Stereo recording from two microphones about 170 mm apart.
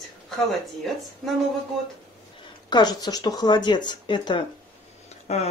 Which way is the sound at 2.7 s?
25° left (ahead or behind).